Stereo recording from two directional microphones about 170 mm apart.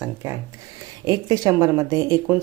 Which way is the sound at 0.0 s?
10° right (ahead or behind).